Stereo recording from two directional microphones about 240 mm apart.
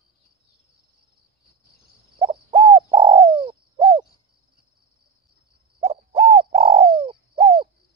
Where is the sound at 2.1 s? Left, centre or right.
Right.